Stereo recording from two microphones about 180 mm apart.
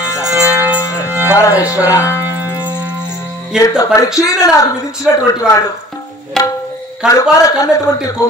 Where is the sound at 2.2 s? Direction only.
10° right (ahead or behind).